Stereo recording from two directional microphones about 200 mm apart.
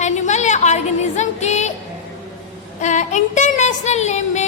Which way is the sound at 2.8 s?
35° left (ahead or behind).